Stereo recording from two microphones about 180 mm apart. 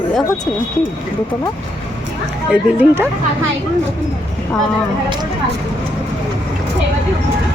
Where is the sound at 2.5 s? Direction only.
10° right (ahead or behind).